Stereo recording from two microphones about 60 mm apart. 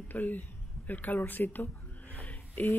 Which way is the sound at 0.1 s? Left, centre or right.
Left.